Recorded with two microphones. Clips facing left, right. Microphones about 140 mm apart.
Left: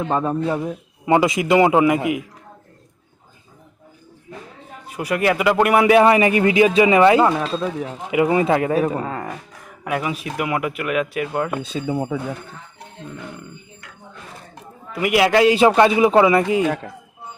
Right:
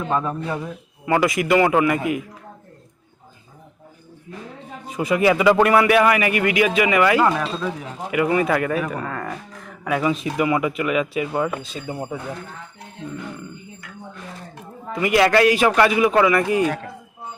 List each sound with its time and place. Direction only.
0.1 s a man's voice: 30° left (ahead or behind)
4.9 s speech: 5° left (ahead or behind)
5.7 s a man's voice: 20° left (ahead or behind)
9.8 s speech: 5° left (ahead or behind)
15.0 s a man's voice: 10° left (ahead or behind)